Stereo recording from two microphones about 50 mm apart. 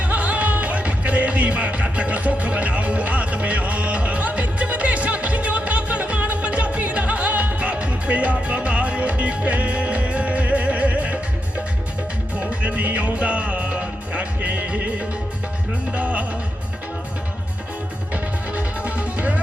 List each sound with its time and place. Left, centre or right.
0.0 s music: right
18.1 s music: right